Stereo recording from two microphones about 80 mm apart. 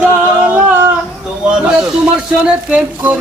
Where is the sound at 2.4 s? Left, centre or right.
Centre.